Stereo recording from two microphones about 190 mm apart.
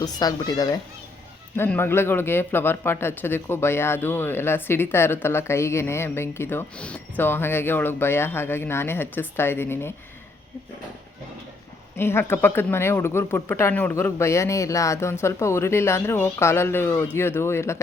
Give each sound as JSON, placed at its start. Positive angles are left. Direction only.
{"t": 0.0, "sound": "a child's voice", "side_deg": 20}
{"t": 11.9, "sound": "a man's voice", "side_deg": 10}